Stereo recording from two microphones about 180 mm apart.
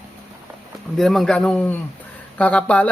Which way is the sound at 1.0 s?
Centre (ahead or behind).